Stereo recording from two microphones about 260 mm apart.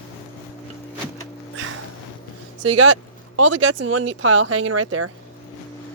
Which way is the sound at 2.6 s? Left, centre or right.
Right.